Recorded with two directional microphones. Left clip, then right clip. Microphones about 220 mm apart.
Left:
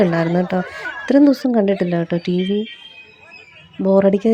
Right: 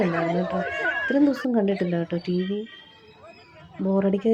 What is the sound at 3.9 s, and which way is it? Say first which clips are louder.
Speech: left 10 dB; 35° left (ahead or behind).